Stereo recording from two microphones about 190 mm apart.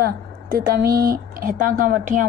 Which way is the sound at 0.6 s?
50° right (ahead or behind).